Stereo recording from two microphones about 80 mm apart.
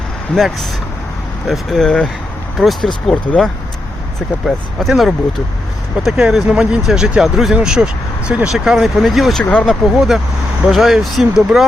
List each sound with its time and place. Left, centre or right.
0.3 s speech: centre
9.4 s speech: centre
9.6 s speech: centre